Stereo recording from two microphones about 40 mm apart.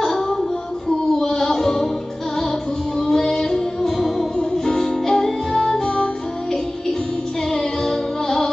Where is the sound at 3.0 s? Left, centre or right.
Centre.